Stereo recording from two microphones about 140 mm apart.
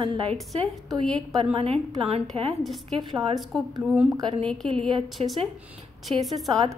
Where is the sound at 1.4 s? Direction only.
45° right (ahead or behind).